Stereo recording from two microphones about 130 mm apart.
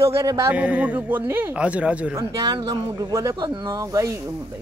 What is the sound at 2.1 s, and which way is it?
Speech, 30° right (ahead or behind).